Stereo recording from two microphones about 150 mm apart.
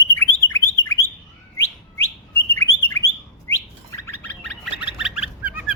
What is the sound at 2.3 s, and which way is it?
Bird, 15° left (ahead or behind).